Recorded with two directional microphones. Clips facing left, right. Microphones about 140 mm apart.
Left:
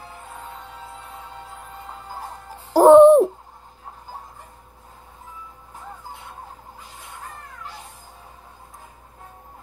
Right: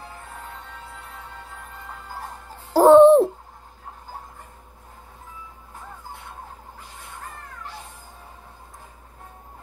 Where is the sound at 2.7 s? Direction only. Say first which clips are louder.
Left 2 dB; 15° left (ahead or behind).